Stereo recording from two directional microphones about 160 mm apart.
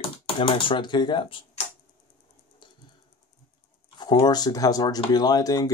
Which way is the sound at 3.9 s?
25° left (ahead or behind).